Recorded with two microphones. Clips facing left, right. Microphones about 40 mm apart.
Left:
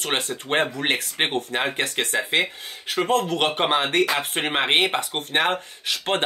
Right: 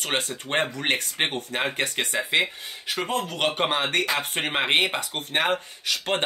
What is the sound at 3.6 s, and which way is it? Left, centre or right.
A man's voice, centre.